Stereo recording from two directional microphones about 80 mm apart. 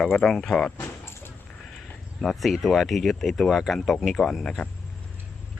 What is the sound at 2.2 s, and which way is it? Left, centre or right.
Speech, centre.